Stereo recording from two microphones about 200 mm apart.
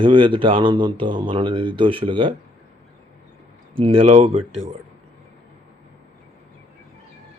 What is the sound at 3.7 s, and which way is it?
Speech, 30° right (ahead or behind).